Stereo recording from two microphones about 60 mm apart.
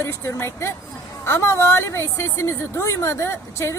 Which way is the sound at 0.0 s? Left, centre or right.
Left.